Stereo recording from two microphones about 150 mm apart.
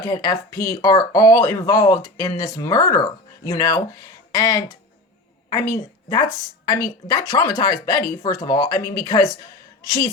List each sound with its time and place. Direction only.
0.0 s a woman's voice: 25° left (ahead or behind)